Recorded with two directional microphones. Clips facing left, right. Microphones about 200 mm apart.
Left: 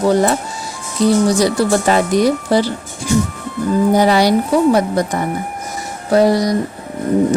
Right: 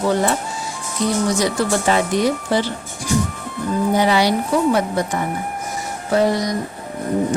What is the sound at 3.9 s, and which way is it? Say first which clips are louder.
Speech: left 3 dB; 40° left (ahead or behind).